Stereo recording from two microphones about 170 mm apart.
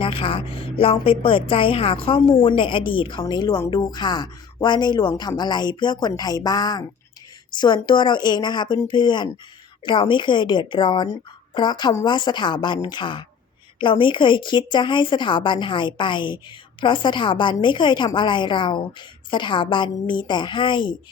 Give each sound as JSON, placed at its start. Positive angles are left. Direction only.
{"t": 0.0, "sound": "a woman's voice", "side_deg": 30}